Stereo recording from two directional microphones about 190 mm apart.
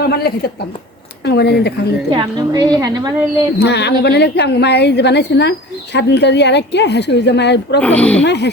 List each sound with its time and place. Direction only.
0.1 s a woman's voice: 55° left (ahead or behind)
2.1 s a woman's voice: 20° right (ahead or behind)
3.6 s a woman's voice: 60° left (ahead or behind)
7.8 s speech: 5° left (ahead or behind)
8.2 s a woman's voice: 65° left (ahead or behind)